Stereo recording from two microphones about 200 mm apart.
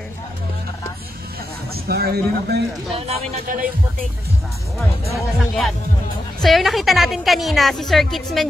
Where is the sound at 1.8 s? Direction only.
50° right (ahead or behind).